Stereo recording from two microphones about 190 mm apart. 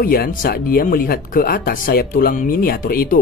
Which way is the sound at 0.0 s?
50° left (ahead or behind).